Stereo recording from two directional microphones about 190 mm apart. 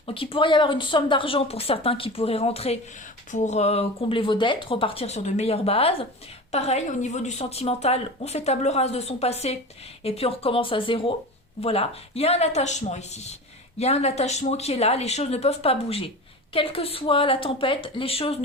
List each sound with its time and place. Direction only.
0.1 s a woman's voice: 30° left (ahead or behind)